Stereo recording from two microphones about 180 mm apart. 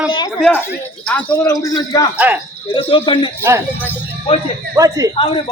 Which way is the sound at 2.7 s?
30° left (ahead or behind).